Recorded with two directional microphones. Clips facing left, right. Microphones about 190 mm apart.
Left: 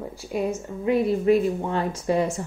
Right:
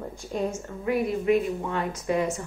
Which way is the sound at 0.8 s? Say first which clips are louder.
Left 4 dB; 30° left (ahead or behind).